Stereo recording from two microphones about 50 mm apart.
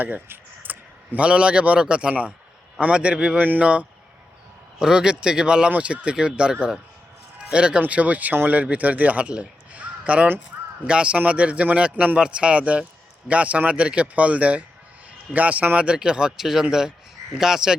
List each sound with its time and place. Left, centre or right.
0.0 s a sound: right
1.2 s a man's voice: right
3.3 s speech: right
4.8 s a man's voice: centre